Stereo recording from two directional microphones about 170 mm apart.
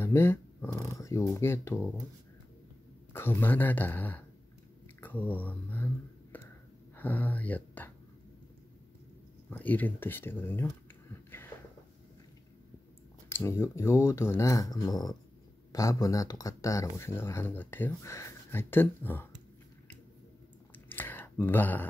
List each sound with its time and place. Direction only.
0.0 s a sound: 15° left (ahead or behind)
1.3 s speech: 15° left (ahead or behind)
3.1 s speech: 15° left (ahead or behind)
6.3 s a sound: 10° left (ahead or behind)
7.0 s speech: 10° left (ahead or behind)
9.5 s speech: 10° left (ahead or behind)
13.3 s speech: 15° left (ahead or behind)
20.7 s clicking: 10° left (ahead or behind)